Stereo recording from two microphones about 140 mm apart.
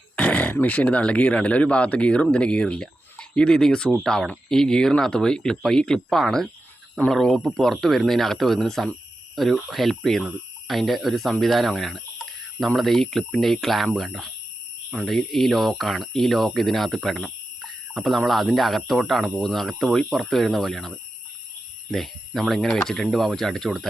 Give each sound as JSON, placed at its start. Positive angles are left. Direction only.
{"t": 0.2, "sound": "speech", "side_deg": 10}